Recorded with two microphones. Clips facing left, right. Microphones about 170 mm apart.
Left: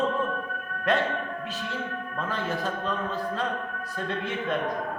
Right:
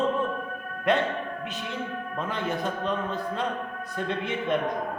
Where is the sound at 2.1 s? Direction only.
20° right (ahead or behind).